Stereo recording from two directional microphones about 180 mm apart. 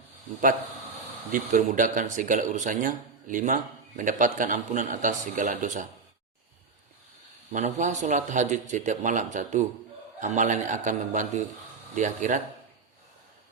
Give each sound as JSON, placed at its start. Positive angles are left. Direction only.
{"t": 1.3, "sound": "speech", "side_deg": -45}
{"t": 7.5, "sound": "speech", "side_deg": -45}